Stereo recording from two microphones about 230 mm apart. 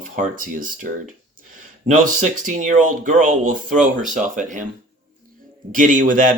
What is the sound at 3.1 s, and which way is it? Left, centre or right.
Speech, right.